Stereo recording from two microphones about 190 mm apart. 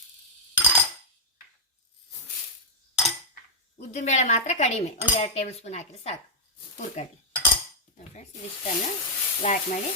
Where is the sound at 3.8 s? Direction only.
40° left (ahead or behind).